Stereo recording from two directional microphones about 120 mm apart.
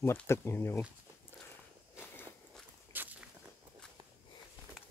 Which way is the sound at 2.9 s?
15° right (ahead or behind).